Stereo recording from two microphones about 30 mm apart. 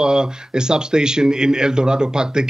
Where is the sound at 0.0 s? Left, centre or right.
Right.